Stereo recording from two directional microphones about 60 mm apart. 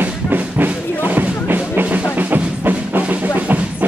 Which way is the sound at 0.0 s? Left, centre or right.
Right.